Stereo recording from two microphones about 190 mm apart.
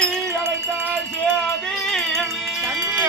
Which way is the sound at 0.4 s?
10° right (ahead or behind).